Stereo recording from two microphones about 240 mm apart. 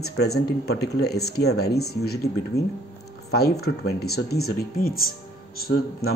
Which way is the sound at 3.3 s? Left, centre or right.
Left.